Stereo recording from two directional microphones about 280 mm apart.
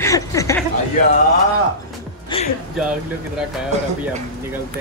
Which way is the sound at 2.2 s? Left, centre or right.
Centre.